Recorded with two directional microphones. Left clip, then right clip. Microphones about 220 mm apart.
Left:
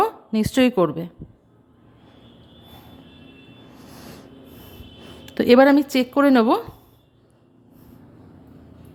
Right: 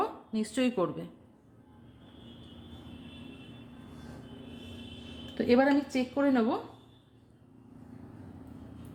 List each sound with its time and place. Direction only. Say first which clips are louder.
0.0 s a woman's voice: left 12 dB; 35° left (ahead or behind)
5.2 s speech: left 12 dB; 45° left (ahead or behind)